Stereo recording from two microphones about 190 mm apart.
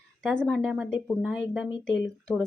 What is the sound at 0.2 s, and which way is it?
A woman's voice, 5° left (ahead or behind).